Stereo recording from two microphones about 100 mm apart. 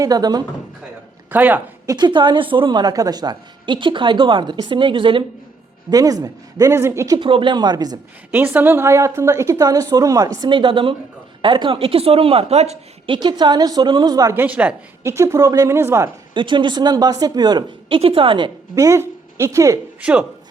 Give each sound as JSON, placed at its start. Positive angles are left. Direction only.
{"t": 0.0, "sound": "speech", "side_deg": -40}
{"t": 1.3, "sound": "a woman's voice", "side_deg": -20}
{"t": 1.9, "sound": "a woman's voice", "side_deg": -45}
{"t": 5.9, "sound": "speech", "side_deg": -35}
{"t": 7.2, "sound": "a woman's voice", "side_deg": -55}
{"t": 8.3, "sound": "a woman's voice", "side_deg": -20}
{"t": 10.5, "sound": "speech", "side_deg": -55}
{"t": 13.1, "sound": "a woman's voice", "side_deg": -45}
{"t": 14.3, "sound": "a woman's voice", "side_deg": -15}
{"t": 15.0, "sound": "a woman's voice", "side_deg": -30}
{"t": 16.3, "sound": "a woman's voice", "side_deg": -55}
{"t": 17.8, "sound": "speech", "side_deg": -65}
{"t": 18.7, "sound": "speech", "side_deg": -35}
{"t": 20.0, "sound": "a woman's voice", "side_deg": -10}